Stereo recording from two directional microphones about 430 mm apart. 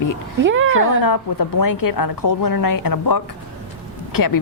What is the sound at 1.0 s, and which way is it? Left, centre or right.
A woman's voice, left.